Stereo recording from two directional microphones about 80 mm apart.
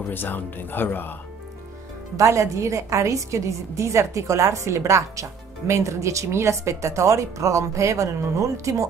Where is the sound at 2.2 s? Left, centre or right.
Right.